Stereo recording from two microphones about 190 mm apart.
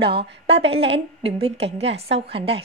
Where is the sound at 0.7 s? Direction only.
30° right (ahead or behind).